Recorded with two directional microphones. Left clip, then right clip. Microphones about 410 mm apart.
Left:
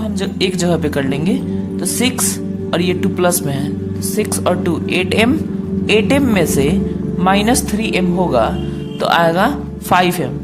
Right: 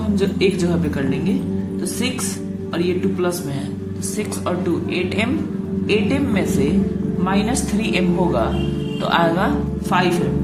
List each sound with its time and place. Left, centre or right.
0.2 s a woman's voice: left
2.7 s a woman's voice: left